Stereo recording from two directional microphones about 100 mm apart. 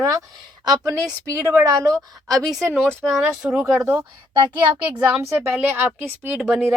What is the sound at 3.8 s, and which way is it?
Speech, 25° right (ahead or behind).